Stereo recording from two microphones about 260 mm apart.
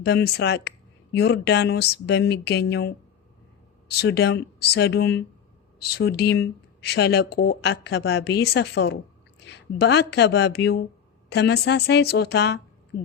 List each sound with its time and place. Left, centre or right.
0.0 s speech: left